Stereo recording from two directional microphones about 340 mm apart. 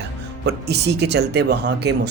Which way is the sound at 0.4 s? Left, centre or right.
Right.